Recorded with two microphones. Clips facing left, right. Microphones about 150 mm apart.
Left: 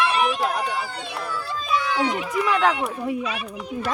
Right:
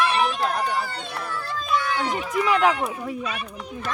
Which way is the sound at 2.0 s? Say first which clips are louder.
Left 1 dB; 10° left (ahead or behind).